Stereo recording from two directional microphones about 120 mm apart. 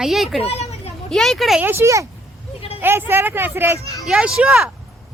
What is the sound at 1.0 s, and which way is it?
Speech, 5° left (ahead or behind).